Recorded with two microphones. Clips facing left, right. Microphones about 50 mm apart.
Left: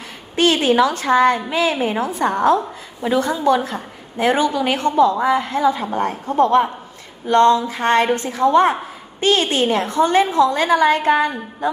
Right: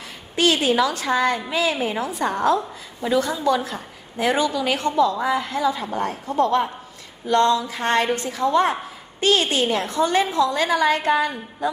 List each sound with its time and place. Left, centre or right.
0.4 s a woman's voice: left